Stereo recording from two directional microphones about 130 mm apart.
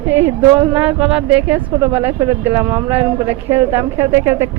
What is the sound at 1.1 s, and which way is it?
Speech, 10° right (ahead or behind).